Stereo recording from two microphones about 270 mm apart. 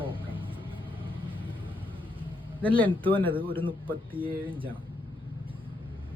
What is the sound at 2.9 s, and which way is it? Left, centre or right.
Speech, centre.